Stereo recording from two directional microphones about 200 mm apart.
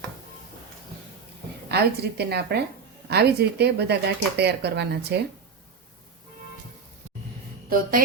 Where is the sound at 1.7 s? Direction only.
55° right (ahead or behind).